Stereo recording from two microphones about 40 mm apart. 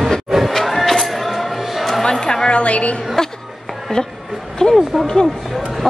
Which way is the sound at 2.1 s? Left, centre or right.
Centre.